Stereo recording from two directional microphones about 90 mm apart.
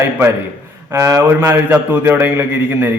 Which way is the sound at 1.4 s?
25° right (ahead or behind).